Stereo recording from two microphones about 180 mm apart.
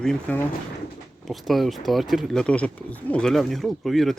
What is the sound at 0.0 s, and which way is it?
Speech, 5° left (ahead or behind).